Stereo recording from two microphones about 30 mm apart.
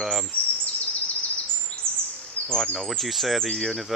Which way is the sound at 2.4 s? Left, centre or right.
Left.